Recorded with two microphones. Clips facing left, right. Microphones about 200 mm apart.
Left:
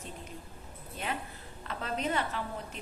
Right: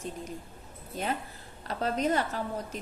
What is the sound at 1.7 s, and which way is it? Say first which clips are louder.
A woman's voice: right 5 dB; 40° right (ahead or behind).